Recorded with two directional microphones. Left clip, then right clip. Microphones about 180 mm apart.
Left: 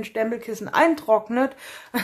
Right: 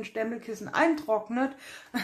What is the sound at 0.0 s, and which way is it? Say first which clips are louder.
Speech: left 7 dB; 25° left (ahead or behind).